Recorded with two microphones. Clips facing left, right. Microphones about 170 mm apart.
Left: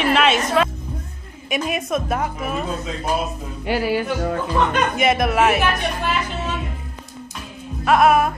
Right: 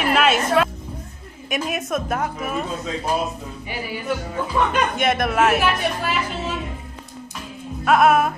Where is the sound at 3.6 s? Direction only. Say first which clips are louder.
Left 8 dB; 75° left (ahead or behind).